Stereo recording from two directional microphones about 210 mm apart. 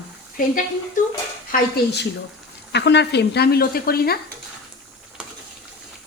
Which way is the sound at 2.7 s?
55° left (ahead or behind).